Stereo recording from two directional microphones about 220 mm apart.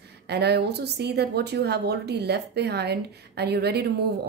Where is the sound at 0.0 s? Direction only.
50° right (ahead or behind).